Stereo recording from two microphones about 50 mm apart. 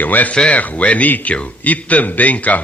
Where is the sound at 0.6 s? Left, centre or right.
Left.